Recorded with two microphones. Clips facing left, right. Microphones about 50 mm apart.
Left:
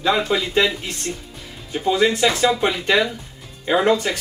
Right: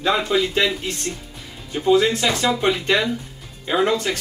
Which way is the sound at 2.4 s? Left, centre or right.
Centre.